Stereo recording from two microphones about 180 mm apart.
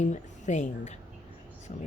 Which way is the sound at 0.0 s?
40° left (ahead or behind).